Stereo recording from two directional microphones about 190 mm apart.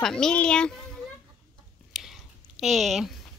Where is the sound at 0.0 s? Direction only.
5° left (ahead or behind).